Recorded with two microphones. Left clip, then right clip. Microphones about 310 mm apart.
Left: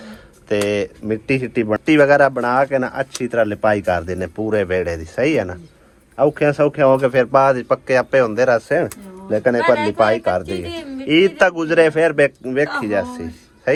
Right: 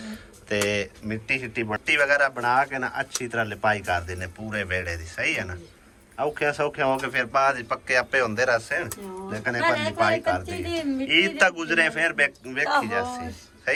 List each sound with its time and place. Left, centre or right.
0.0 s speech: centre